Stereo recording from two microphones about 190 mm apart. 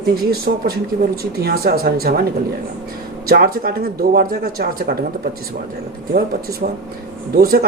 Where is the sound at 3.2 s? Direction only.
55° right (ahead or behind).